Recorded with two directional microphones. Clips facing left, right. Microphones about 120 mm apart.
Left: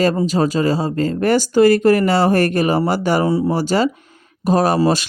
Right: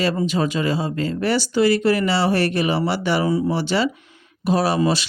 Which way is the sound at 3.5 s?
40° left (ahead or behind).